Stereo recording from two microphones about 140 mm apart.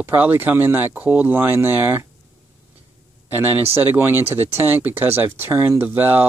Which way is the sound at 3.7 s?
15° right (ahead or behind).